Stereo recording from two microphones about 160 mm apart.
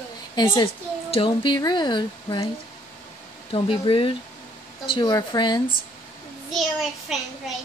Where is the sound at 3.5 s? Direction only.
35° left (ahead or behind).